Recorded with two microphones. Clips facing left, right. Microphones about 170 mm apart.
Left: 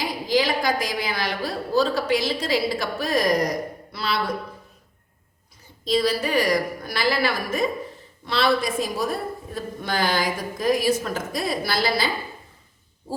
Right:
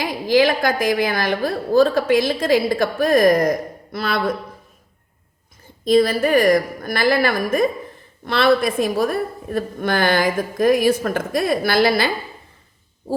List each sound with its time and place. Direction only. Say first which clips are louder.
0.0 s a woman's voice: right 6 dB; 55° right (ahead or behind)
5.8 s a woman's voice: right 7 dB; 50° right (ahead or behind)